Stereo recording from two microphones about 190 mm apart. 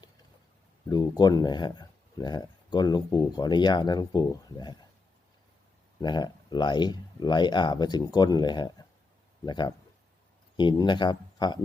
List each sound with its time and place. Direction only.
0.9 s speech: 20° left (ahead or behind)
6.0 s speech: 20° left (ahead or behind)